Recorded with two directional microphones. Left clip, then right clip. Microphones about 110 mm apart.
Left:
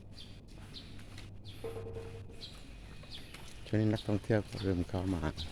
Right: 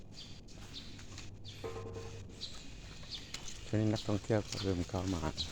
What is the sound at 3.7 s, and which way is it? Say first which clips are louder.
Speech: left 2 dB; 45° left (ahead or behind).